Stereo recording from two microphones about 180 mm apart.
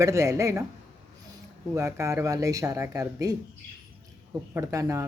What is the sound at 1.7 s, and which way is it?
Speech, 15° right (ahead or behind).